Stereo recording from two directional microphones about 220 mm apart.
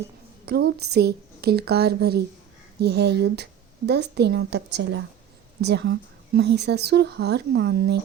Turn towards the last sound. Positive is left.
turn(degrees=-50)  # may be behind; listen again after turning